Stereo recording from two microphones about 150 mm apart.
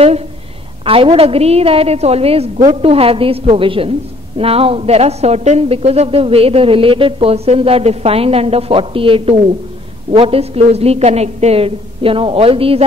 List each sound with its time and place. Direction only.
0.8 s a woman's voice: 40° right (ahead or behind)